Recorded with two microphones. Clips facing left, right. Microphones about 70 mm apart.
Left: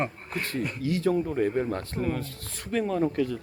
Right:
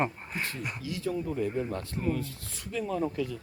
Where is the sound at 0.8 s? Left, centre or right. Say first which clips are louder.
Left 7 dB; left.